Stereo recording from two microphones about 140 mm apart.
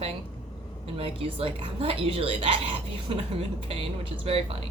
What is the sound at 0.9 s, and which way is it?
Speech, 40° right (ahead or behind).